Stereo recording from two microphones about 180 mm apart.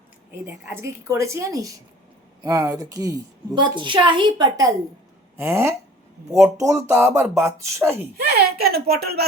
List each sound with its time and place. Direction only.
0.7 s a woman's voice: 15° right (ahead or behind)
8.2 s a woman's voice: 60° right (ahead or behind)